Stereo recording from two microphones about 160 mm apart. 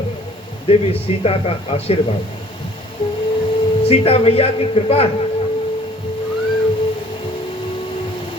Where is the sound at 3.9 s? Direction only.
40° left (ahead or behind).